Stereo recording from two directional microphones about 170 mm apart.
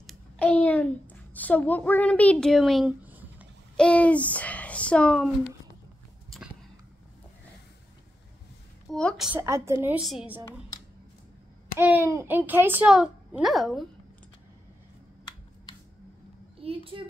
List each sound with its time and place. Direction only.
0.0 s a sound: 10° left (ahead or behind)
1.3 s a child's voice: 10° left (ahead or behind)
3.1 s a sound: 10° right (ahead or behind)
3.7 s a child's voice: 5° left (ahead or behind)
8.9 s a woman's voice: centre (ahead or behind)
9.4 s a child's voice: 15° right (ahead or behind)
9.9 s a woman's voice: 5° right (ahead or behind)
11.8 s a child's voice: 10° right (ahead or behind)
16.6 s a child's voice: 35° right (ahead or behind)